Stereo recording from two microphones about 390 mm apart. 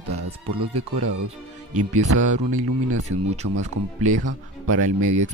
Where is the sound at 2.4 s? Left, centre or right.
Right.